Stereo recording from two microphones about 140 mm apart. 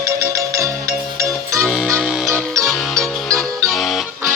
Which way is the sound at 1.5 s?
5° right (ahead or behind).